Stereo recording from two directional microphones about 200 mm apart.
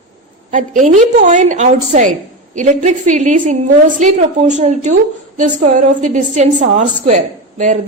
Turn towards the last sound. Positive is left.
turn(degrees=-40)  # may be behind; listen again after turning